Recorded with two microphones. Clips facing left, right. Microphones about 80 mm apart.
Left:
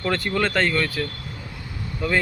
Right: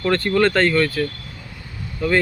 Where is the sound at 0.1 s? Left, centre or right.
Centre.